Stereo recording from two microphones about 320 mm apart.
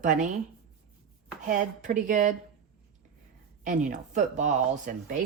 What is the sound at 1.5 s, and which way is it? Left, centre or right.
Speech, right.